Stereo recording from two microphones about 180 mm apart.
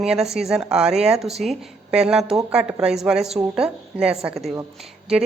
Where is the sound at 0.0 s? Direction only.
Centre (ahead or behind).